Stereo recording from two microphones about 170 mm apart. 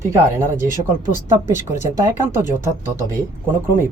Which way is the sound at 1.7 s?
15° right (ahead or behind).